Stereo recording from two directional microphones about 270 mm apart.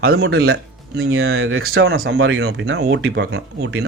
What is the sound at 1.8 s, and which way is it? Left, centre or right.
Speech, right.